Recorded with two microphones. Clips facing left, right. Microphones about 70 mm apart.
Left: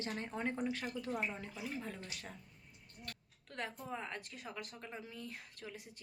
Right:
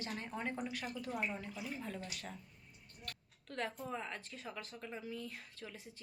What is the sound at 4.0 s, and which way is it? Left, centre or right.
Speech, centre.